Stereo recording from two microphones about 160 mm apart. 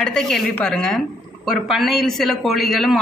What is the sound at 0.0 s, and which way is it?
A woman's voice, centre (ahead or behind).